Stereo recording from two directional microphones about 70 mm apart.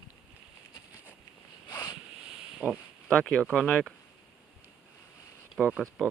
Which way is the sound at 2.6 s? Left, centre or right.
Right.